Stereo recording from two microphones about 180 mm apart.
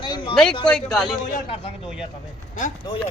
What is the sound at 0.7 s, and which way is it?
Speech, centre (ahead or behind).